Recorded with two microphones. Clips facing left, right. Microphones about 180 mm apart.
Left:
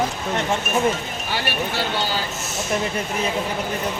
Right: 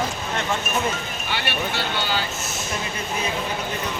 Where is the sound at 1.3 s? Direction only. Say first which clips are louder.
Left 2 dB; 40° left (ahead or behind).